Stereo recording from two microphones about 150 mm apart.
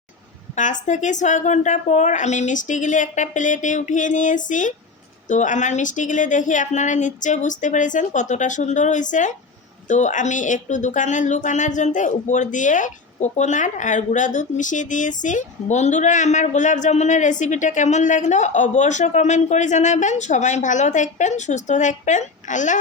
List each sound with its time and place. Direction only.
0.5 s speech: 55° left (ahead or behind)